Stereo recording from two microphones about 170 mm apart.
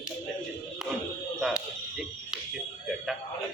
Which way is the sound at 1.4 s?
5° right (ahead or behind).